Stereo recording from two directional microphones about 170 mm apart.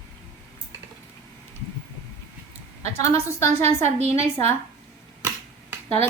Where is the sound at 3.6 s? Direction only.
40° right (ahead or behind).